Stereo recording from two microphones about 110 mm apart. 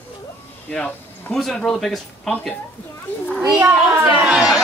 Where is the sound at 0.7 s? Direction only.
15° left (ahead or behind).